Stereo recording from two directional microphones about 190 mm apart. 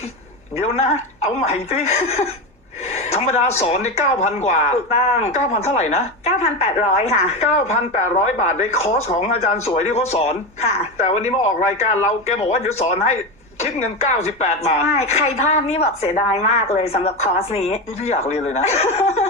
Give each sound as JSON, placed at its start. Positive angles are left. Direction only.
{"t": 0.5, "sound": "speech", "side_deg": 35}
{"t": 2.9, "sound": "gasp", "side_deg": 35}
{"t": 3.6, "sound": "speech", "side_deg": 35}